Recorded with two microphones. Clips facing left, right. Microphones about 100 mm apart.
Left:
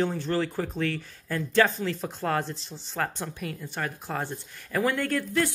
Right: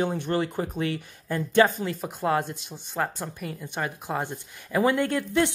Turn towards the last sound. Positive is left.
turn(degrees=-20)  # may be behind; listen again after turning